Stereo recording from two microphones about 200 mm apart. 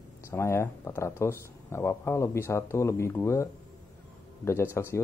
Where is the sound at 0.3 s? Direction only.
15° left (ahead or behind).